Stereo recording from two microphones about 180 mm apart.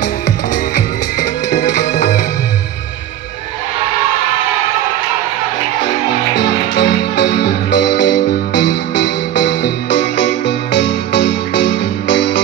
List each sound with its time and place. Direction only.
1.2 s music: 40° left (ahead or behind)
6.8 s music: 75° left (ahead or behind)